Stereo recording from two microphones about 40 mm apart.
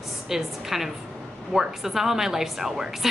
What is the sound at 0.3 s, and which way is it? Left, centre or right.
A woman's voice, centre.